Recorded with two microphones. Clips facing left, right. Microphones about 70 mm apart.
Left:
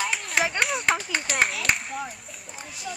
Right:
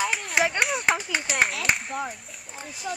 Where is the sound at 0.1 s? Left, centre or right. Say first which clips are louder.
Right 1 dB; centre.